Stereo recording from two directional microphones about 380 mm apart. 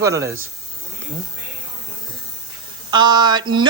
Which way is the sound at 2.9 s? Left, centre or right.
Centre.